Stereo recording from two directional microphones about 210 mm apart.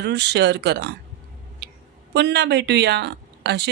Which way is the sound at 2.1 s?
55° right (ahead or behind).